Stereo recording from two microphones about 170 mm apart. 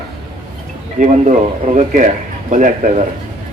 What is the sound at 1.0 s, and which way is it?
A man's voice, 45° right (ahead or behind).